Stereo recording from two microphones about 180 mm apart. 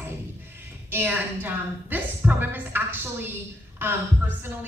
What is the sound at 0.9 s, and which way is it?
A woman's voice, 10° right (ahead or behind).